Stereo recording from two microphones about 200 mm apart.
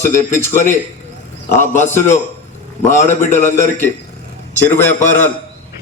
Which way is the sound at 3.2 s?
35° left (ahead or behind).